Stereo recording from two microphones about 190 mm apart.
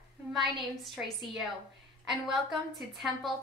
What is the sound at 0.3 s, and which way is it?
A woman's voice, centre (ahead or behind).